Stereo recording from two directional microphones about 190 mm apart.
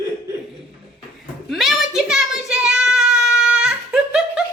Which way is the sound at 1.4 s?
Centre (ahead or behind).